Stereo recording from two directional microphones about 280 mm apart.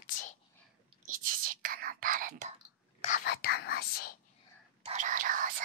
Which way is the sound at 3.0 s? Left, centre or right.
Left.